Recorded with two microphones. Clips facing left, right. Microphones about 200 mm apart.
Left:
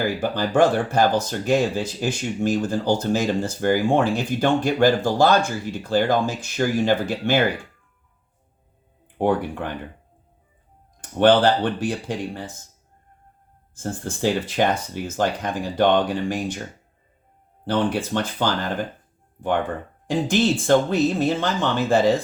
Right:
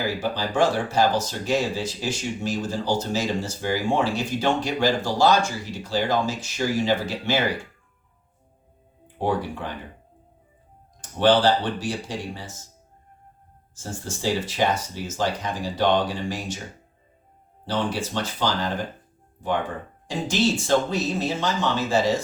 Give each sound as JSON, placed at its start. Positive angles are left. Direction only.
{"t": 0.2, "sound": "speech", "side_deg": 55}
{"t": 9.2, "sound": "speech", "side_deg": 55}
{"t": 11.2, "sound": "speech", "side_deg": 55}
{"t": 13.7, "sound": "speech", "side_deg": 55}
{"t": 17.7, "sound": "speech", "side_deg": 55}